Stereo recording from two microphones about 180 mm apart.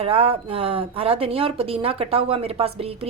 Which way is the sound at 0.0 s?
30° right (ahead or behind).